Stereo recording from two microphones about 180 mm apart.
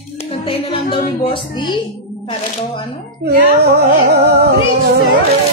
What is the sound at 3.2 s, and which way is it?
Speech, 65° right (ahead or behind).